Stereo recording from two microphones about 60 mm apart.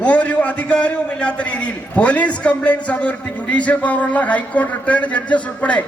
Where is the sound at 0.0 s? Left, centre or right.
Left.